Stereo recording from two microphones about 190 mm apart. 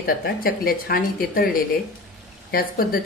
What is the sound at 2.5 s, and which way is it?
Speech, 50° left (ahead or behind).